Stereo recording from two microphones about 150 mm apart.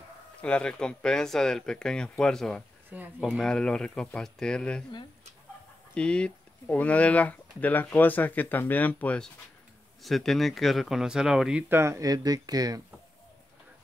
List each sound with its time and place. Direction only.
0.4 s speech: 5° left (ahead or behind)
5.9 s speech: 5° left (ahead or behind)
11.7 s speech: 20° right (ahead or behind)